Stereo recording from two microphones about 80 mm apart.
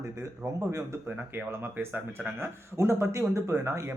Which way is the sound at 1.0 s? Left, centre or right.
Right.